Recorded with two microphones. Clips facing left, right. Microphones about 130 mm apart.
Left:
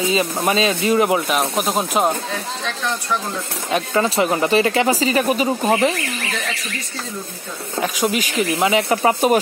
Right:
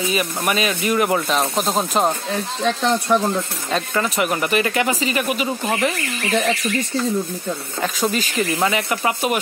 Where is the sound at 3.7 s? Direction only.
15° left (ahead or behind).